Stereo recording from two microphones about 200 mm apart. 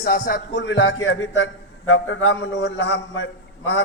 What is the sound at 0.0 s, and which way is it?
Speech, 50° left (ahead or behind).